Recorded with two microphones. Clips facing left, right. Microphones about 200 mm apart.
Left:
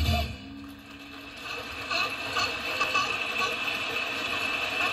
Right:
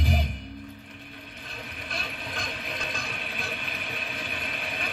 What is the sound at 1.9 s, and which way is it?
Mechanisms, 20° right (ahead or behind).